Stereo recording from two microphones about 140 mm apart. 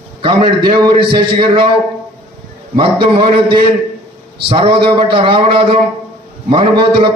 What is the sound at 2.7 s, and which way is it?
A man's voice, 35° right (ahead or behind).